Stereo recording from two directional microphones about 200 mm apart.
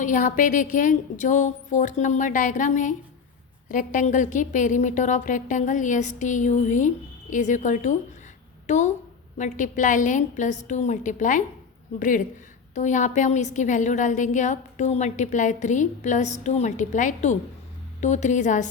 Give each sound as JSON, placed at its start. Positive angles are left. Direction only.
{"t": 0.0, "sound": "a woman's voice", "side_deg": 40}